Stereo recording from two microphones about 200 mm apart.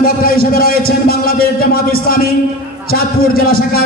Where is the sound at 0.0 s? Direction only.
50° left (ahead or behind).